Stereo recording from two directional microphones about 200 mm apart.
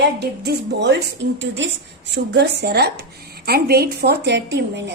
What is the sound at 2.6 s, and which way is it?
A woman's voice, 55° right (ahead or behind).